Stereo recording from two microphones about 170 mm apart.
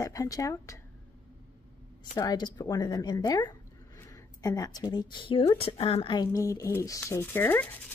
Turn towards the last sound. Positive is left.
turn(degrees=10)  # may be behind; listen again after turning